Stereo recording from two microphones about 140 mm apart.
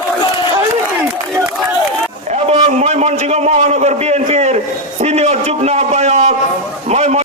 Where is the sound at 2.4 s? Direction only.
50° right (ahead or behind).